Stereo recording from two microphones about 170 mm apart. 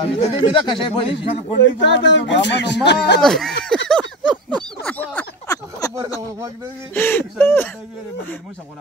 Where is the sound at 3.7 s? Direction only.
5° left (ahead or behind).